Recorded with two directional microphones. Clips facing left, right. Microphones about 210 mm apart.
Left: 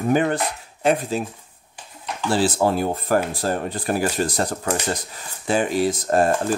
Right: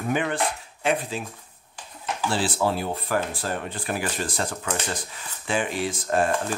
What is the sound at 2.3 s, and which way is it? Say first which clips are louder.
Speech: left 6 dB; 45° left (ahead or behind).